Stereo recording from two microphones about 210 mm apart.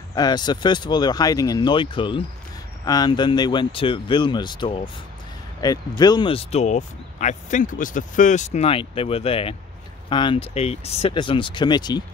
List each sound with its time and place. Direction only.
0.1 s speech: 20° left (ahead or behind)